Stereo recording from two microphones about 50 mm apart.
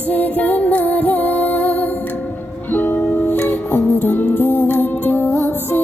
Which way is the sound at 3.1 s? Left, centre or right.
Left.